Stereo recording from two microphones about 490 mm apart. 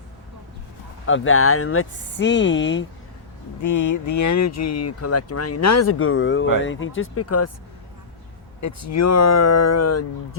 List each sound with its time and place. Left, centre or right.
1.0 s speech: left
3.6 s speech: left
8.6 s speech: left